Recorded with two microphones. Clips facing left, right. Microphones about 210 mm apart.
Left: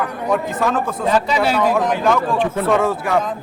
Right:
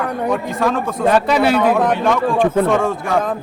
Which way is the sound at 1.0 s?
60° right (ahead or behind).